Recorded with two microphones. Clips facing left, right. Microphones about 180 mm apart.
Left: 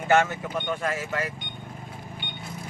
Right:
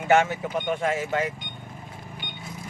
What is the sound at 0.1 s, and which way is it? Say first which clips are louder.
Speech: right 1 dB; 20° right (ahead or behind).